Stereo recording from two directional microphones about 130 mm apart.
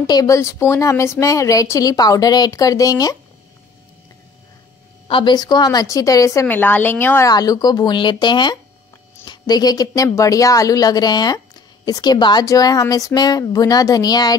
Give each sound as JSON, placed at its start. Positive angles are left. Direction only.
{"t": 0.0, "sound": "a woman's voice", "side_deg": 30}
{"t": 5.0, "sound": "a woman's voice", "side_deg": 40}
{"t": 6.4, "sound": "a woman's voice", "side_deg": 15}
{"t": 7.2, "sound": "a woman's voice", "side_deg": 30}